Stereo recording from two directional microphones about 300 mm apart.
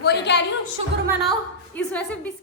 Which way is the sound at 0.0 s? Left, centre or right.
Left.